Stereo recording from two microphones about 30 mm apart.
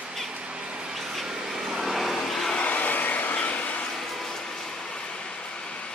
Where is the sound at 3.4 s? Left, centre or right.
Left.